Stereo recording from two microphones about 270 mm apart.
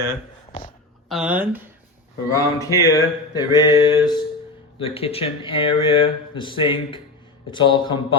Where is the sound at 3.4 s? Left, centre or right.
Centre.